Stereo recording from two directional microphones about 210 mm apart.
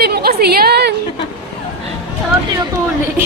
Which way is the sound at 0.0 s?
45° right (ahead or behind).